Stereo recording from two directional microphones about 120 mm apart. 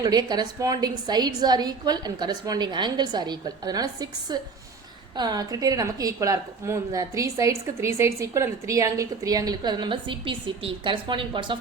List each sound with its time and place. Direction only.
0.0 s a woman's voice: 35° right (ahead or behind)